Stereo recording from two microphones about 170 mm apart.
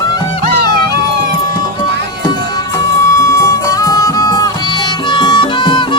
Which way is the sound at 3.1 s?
15° left (ahead or behind).